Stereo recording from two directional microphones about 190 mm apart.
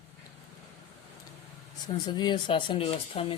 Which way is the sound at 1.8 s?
20° left (ahead or behind).